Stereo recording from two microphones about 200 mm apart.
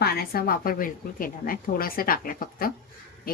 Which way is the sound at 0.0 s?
50° left (ahead or behind).